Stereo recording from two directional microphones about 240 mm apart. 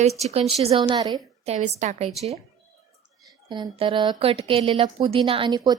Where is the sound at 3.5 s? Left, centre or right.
Right.